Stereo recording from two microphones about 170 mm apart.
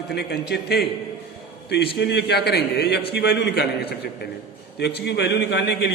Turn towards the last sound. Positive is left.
turn(degrees=85)